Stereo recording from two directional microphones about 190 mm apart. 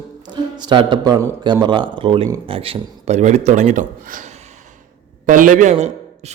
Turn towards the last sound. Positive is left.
turn(degrees=-35)  # may be behind; listen again after turning